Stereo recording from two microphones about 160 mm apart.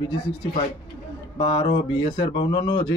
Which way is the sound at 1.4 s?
30° left (ahead or behind).